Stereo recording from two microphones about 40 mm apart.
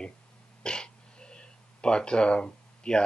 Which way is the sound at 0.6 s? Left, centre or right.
Left.